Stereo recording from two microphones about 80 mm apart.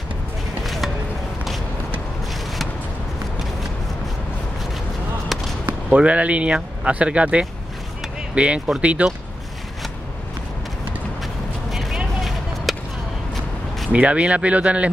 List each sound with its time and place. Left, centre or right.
5.7 s speech: centre
11.7 s vehicle: centre
12.2 s a sound: centre
13.9 s speech: centre